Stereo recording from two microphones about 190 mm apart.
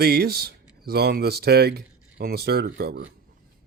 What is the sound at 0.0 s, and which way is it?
Speech, 55° right (ahead or behind).